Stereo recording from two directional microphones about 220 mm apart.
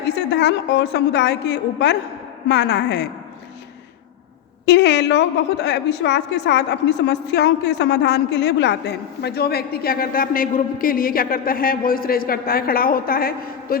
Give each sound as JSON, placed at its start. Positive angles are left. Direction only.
{"t": 0.3, "sound": "a woman's voice", "side_deg": 50}
{"t": 4.6, "sound": "a woman's voice", "side_deg": 50}